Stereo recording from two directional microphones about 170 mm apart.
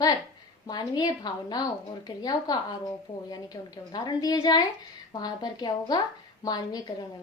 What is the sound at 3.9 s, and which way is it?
A woman's voice, 25° left (ahead or behind).